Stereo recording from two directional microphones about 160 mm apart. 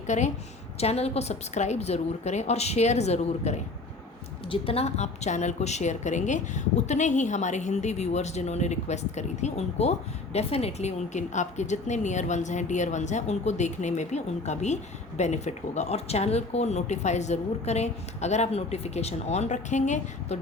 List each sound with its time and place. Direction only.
0.1 s a woman's voice: 45° left (ahead or behind)